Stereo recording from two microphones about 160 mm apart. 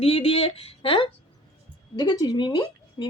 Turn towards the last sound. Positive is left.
turn(degrees=25)  # may be behind; listen again after turning